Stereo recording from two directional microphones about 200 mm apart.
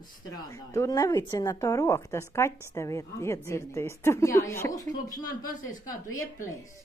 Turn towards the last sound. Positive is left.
turn(degrees=15)  # may be behind; listen again after turning